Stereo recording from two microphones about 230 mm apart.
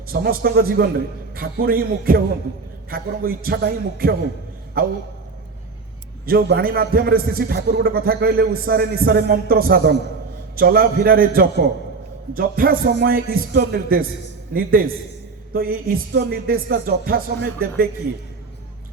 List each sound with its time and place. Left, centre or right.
0.1 s a man's voice: right
6.2 s a man's voice: right